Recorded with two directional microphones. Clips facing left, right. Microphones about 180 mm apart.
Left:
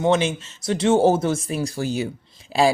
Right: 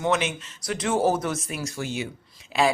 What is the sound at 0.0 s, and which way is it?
Speech, 30° left (ahead or behind).